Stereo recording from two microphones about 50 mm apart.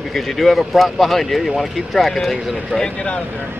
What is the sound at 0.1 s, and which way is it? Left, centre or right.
Speech, centre.